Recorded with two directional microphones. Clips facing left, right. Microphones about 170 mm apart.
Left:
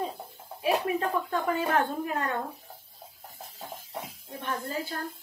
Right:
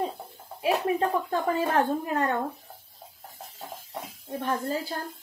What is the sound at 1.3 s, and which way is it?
Speech, 35° right (ahead or behind).